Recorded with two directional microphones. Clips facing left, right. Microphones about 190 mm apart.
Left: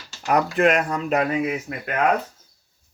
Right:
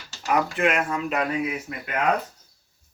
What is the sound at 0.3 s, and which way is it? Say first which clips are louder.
Speech: left 4 dB; 40° left (ahead or behind).